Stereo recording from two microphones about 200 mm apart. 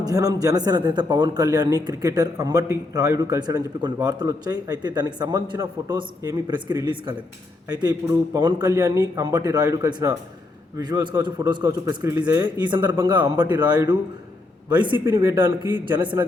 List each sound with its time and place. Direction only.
0.0 s a man's voice: 20° right (ahead or behind)